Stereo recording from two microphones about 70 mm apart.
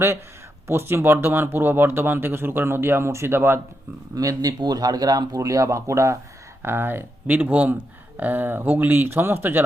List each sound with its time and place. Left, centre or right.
0.7 s speech: right
4.1 s speech: right
6.6 s speech: right